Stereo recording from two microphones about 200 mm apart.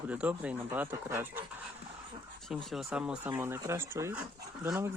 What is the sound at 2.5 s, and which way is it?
Speech, centre (ahead or behind).